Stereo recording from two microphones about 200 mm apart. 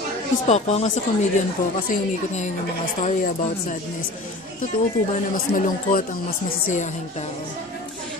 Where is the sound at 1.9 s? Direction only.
35° left (ahead or behind).